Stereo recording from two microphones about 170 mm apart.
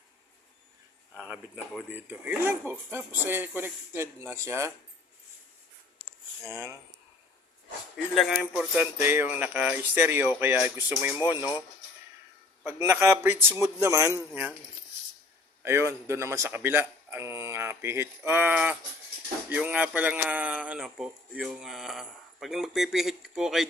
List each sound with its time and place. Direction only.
1.1 s speech: 5° right (ahead or behind)
6.5 s speech: 15° right (ahead or behind)
7.9 s speech: centre (ahead or behind)
8.4 s speech: 10° right (ahead or behind)
12.6 s speech: 15° right (ahead or behind)
15.6 s speech: 15° right (ahead or behind)